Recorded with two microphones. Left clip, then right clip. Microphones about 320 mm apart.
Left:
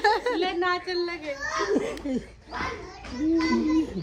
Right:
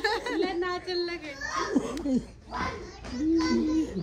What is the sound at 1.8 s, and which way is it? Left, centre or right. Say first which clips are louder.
Speech: left 2 dB; right.